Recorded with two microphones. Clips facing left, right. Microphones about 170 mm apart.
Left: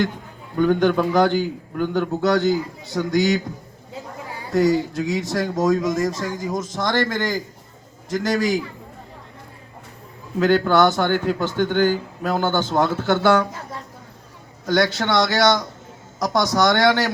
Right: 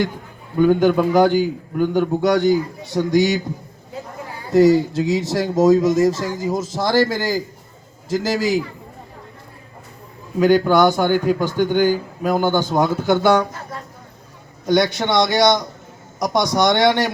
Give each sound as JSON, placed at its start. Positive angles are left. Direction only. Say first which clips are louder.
{"t": 0.5, "sound": "a man's voice", "louder": "right 3 dB", "side_deg": -10}
{"t": 4.9, "sound": "a man's voice", "louder": "right 3 dB", "side_deg": -25}
{"t": 10.4, "sound": "a man's voice", "louder": "right 3 dB", "side_deg": -15}
{"t": 14.7, "sound": "a man's voice", "louder": "right 2 dB", "side_deg": -15}